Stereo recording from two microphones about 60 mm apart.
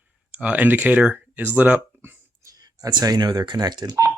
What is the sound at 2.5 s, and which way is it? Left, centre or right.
Speech, right.